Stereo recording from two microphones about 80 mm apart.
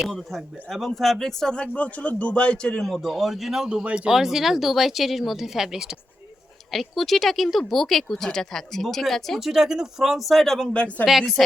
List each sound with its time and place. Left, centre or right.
0.0 s speech: centre
10.8 s speech: centre
11.0 s speech: centre